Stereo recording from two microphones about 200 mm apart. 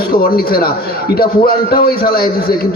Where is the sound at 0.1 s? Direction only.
50° left (ahead or behind).